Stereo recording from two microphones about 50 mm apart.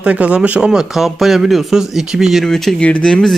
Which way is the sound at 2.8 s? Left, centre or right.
Left.